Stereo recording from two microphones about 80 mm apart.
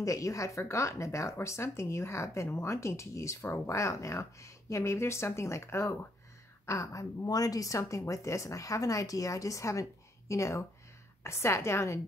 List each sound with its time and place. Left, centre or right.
0.0 s a woman's voice: left